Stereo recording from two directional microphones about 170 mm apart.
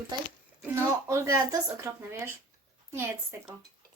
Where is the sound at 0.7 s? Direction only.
15° right (ahead or behind).